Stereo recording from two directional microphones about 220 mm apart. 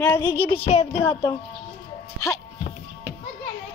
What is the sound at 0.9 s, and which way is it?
Speech, 10° left (ahead or behind).